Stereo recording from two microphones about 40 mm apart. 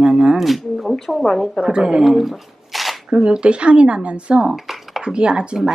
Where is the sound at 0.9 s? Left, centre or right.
Centre.